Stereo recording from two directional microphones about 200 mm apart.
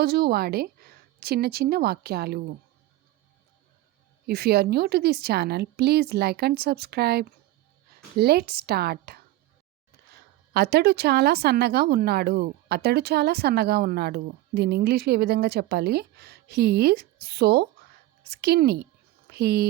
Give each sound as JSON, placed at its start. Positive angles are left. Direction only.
{"t": 0.0, "sound": "speech", "side_deg": -50}
{"t": 4.3, "sound": "speech", "side_deg": -50}
{"t": 10.5, "sound": "speech", "side_deg": -50}